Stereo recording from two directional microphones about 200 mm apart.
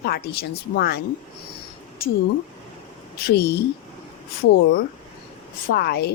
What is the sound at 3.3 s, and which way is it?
Speech, 55° left (ahead or behind).